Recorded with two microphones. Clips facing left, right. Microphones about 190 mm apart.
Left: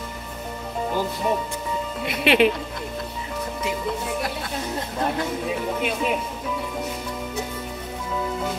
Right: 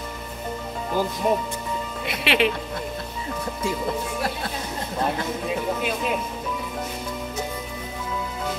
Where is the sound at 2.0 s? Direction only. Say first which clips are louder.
Left 4 dB; 50° left (ahead or behind).